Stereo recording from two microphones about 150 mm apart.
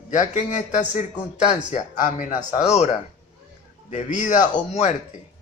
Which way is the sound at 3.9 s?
55° left (ahead or behind).